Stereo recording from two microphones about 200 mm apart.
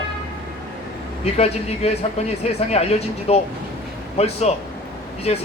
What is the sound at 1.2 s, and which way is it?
A man's voice, 30° left (ahead or behind).